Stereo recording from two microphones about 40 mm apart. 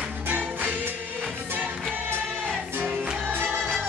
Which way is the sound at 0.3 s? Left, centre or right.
Right.